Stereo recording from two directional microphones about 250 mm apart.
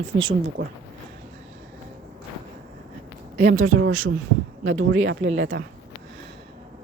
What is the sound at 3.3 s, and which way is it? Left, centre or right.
Speech, right.